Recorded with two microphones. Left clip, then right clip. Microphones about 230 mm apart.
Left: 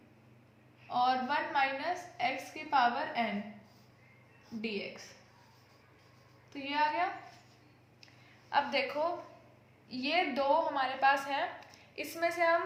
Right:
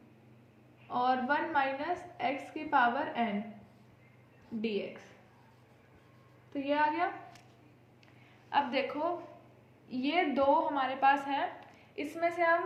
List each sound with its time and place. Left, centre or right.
0.9 s a woman's voice: left
4.6 s a woman's voice: left
6.5 s a woman's voice: left
8.0 s a sound: left
9.9 s a woman's voice: left